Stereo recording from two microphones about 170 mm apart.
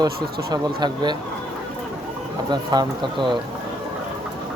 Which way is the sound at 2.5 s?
25° right (ahead or behind).